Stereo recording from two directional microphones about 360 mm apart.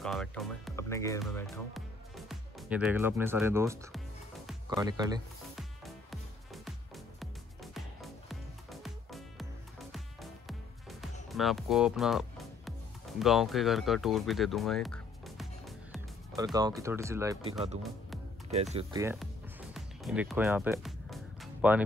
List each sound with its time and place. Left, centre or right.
0.0 s music: centre
4.5 s speech: centre
5.6 s music: centre
11.2 s speech: centre
13.2 s music: centre
16.5 s speech: centre
19.7 s music: centre